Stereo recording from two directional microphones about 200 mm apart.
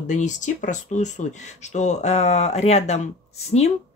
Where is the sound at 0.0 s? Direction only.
40° left (ahead or behind).